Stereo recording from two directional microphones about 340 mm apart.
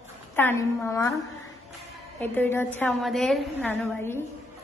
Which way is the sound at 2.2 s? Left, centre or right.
Centre.